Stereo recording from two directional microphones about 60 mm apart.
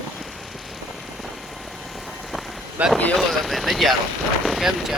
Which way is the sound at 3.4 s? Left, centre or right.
Centre.